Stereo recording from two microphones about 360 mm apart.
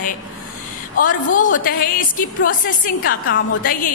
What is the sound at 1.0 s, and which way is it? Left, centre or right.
A woman's voice, left.